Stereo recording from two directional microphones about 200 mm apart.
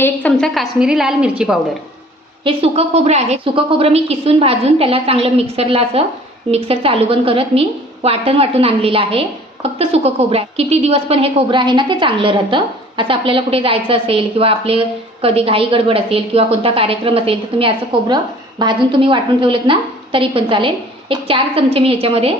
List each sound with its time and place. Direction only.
0.0 s a woman's voice: 5° left (ahead or behind)
2.4 s a woman's voice: 30° right (ahead or behind)